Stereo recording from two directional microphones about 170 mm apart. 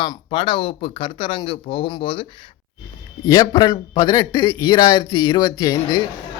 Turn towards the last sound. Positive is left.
turn(degrees=25)  # may be behind; listen again after turning